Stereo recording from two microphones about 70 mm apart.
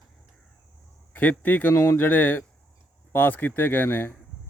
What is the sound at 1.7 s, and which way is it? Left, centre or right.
Speech, left.